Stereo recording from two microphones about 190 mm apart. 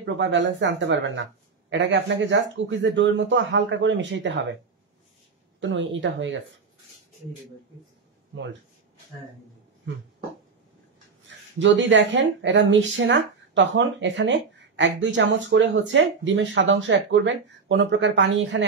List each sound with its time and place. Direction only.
0.0 s speech: 70° right (ahead or behind)
5.6 s speech: 75° right (ahead or behind)
11.2 s speech: 75° right (ahead or behind)